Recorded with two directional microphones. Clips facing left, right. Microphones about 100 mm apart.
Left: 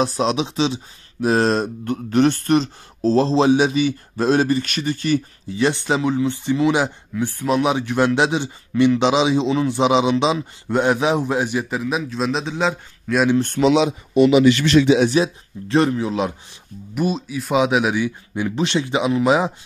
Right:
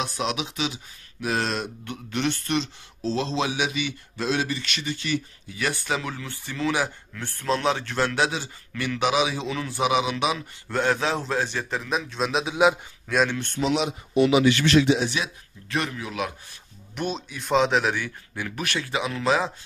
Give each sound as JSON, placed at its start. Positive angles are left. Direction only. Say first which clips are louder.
{"t": 0.0, "sound": "speech", "louder": "left 8 dB", "side_deg": 35}
{"t": 5.5, "sound": "speech", "louder": "left 8 dB", "side_deg": 25}
{"t": 13.6, "sound": "speech", "louder": "left 8 dB", "side_deg": 80}
{"t": 15.0, "sound": "speech", "louder": "left 11 dB", "side_deg": 30}
{"t": 16.9, "sound": "speech", "louder": "left 8 dB", "side_deg": 5}